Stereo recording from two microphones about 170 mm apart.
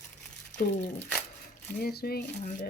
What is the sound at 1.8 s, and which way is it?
Speech, 65° left (ahead or behind).